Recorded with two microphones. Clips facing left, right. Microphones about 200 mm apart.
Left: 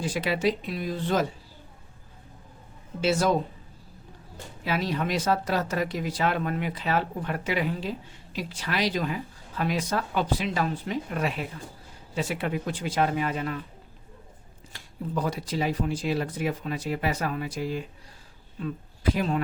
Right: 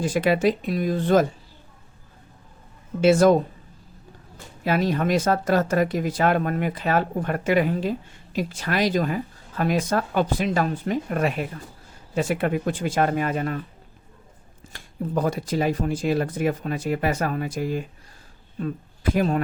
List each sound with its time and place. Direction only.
0.0 s speech: 50° right (ahead or behind)
3.0 s speech: 50° right (ahead or behind)
4.6 s speech: 50° right (ahead or behind)
14.7 s speech: 50° right (ahead or behind)